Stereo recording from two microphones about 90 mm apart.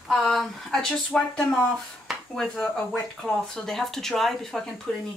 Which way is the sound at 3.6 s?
5° left (ahead or behind).